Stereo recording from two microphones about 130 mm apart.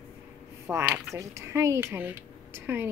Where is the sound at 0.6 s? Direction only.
15° right (ahead or behind).